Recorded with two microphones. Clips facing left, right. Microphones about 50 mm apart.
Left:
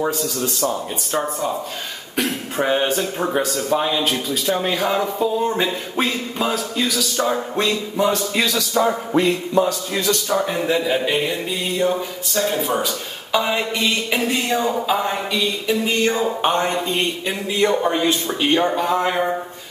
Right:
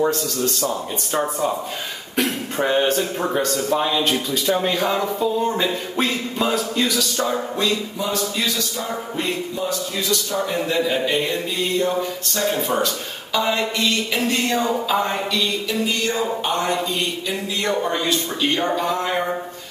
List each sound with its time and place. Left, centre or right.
0.0 s speech: centre
7.5 s speech: left
9.1 s music: left
10.7 s speech: centre
13.3 s speech: centre
14.9 s a sound: centre; by 17.6 s left
17.6 s a sound: centre